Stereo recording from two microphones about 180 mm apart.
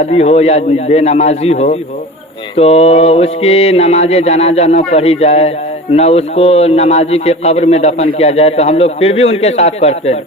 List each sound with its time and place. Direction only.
0.0 s mantra: 35° left (ahead or behind)